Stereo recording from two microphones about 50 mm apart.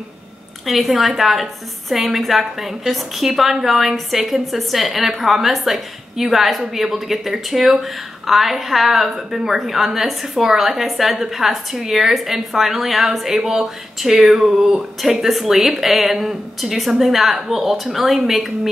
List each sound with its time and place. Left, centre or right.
0.7 s speech: centre